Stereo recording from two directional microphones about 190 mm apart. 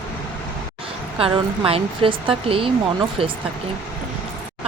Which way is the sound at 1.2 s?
30° right (ahead or behind).